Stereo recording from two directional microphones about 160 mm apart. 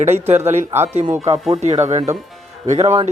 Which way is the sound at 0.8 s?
45° right (ahead or behind).